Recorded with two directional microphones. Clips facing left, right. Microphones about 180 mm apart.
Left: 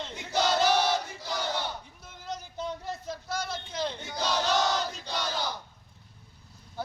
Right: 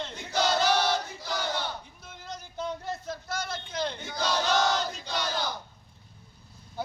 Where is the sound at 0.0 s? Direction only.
Centre (ahead or behind).